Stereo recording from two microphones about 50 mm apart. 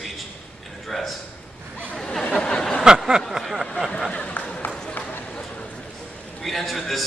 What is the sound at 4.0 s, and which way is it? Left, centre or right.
Speech, centre.